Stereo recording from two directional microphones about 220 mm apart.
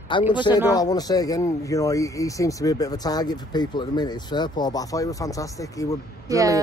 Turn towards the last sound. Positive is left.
turn(degrees=-15)  # may be behind; listen again after turning